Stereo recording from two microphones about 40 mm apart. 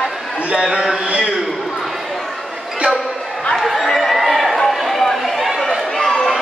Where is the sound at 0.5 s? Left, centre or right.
Right.